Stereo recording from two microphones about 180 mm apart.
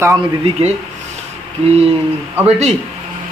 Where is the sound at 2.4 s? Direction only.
35° right (ahead or behind).